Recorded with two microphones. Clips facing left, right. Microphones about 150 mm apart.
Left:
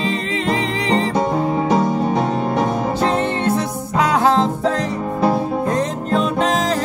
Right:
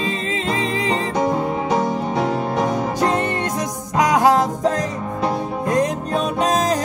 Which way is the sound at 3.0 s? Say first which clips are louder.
Left 1 dB; 15° right (ahead or behind).